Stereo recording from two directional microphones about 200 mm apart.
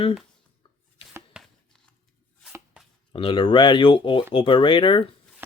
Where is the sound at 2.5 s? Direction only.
5° right (ahead or behind).